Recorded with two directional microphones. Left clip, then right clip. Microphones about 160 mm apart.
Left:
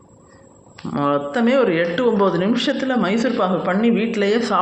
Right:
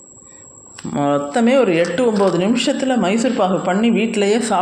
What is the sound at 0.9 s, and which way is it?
Speech, 15° right (ahead or behind).